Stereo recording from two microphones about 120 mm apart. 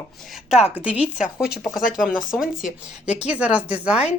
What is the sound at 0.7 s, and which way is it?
Speech, 10° right (ahead or behind).